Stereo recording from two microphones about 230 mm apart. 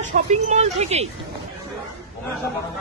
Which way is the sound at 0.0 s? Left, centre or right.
Right.